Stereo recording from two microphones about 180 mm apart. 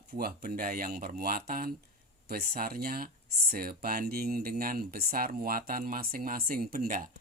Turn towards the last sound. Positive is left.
turn(degrees=-50)  # may be behind; listen again after turning